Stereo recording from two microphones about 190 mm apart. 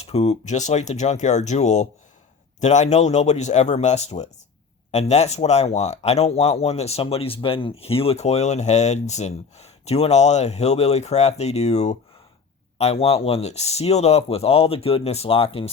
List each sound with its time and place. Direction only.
0.0 s speech: 30° left (ahead or behind)